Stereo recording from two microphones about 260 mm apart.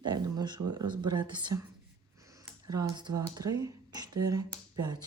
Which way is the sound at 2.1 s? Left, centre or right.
Centre.